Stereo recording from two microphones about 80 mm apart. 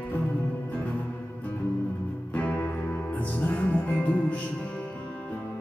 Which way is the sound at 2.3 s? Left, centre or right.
Centre.